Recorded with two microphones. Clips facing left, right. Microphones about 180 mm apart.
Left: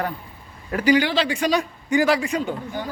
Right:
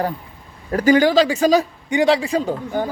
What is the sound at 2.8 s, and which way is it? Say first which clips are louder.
Speech: right 11 dB; 50° right (ahead or behind).